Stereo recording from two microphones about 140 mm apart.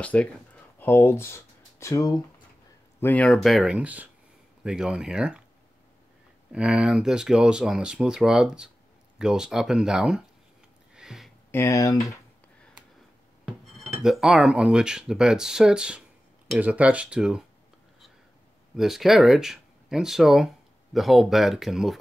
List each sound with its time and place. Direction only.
0.0 s speech: 10° left (ahead or behind); by 2.2 s 25° left (ahead or behind)
3.0 s speech: 10° left (ahead or behind)
3.4 s speech: 5° right (ahead or behind)
6.5 s speech: 5° right (ahead or behind)
11.0 s a sound: centre (ahead or behind)
11.5 s speech: 20° left (ahead or behind)
13.7 s speech: centre (ahead or behind)
18.8 s speech: centre (ahead or behind)